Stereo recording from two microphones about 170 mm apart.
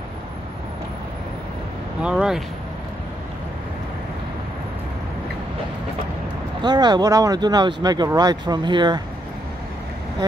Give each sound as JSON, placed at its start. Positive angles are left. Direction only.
{"t": 2.0, "sound": "speech", "side_deg": -5}
{"t": 6.6, "sound": "speech", "side_deg": -25}